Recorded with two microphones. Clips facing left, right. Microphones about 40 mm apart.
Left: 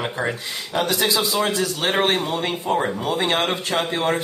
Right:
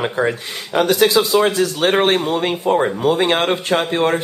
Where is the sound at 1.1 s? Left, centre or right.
Centre.